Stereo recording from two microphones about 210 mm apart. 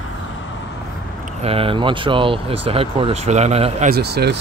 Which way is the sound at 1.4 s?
25° right (ahead or behind).